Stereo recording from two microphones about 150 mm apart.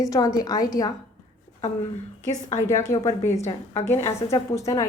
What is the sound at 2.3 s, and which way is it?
Speech, 25° left (ahead or behind).